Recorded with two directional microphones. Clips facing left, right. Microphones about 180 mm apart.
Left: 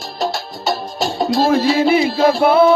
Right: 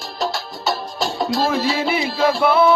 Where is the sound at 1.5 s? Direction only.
45° left (ahead or behind).